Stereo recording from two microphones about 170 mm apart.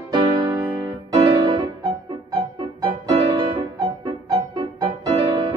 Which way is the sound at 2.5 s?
30° right (ahead or behind).